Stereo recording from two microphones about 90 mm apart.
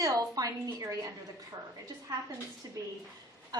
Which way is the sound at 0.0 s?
40° right (ahead or behind).